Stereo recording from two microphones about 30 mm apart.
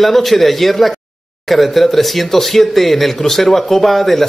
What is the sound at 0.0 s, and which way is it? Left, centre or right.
A man's voice, centre.